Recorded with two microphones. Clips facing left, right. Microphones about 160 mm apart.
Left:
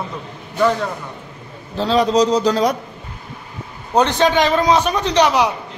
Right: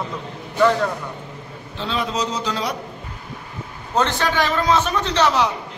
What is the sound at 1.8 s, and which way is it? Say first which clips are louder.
Speech: left 9 dB; 40° left (ahead or behind).